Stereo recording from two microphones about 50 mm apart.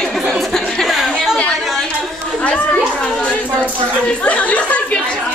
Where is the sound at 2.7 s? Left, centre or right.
Left.